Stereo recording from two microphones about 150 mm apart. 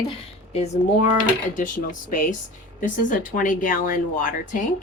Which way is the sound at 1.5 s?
60° left (ahead or behind).